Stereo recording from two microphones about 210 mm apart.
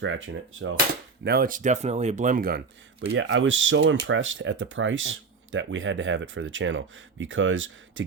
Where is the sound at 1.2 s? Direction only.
50° right (ahead or behind).